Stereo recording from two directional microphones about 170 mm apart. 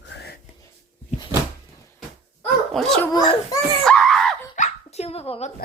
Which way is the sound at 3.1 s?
25° left (ahead or behind).